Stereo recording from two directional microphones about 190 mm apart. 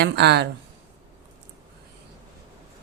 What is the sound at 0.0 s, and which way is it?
Speech, 60° right (ahead or behind).